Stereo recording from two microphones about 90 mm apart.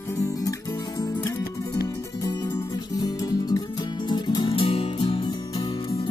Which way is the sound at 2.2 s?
45° left (ahead or behind).